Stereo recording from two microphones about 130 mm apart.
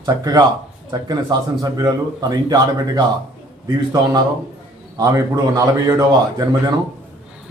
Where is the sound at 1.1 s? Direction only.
30° right (ahead or behind).